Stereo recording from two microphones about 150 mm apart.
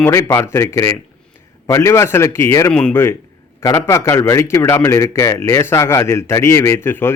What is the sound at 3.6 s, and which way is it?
A man's voice, 20° left (ahead or behind).